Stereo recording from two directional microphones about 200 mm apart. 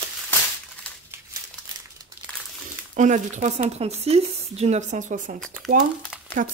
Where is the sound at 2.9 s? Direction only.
40° right (ahead or behind).